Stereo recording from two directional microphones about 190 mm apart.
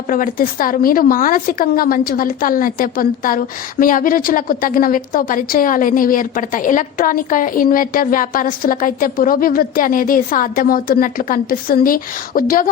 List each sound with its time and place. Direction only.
0.1 s a woman's voice: 45° left (ahead or behind)